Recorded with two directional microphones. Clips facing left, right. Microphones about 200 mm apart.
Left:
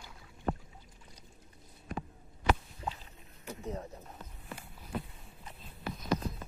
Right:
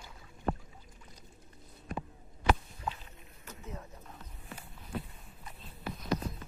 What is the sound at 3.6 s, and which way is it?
Pigeon, 35° left (ahead or behind).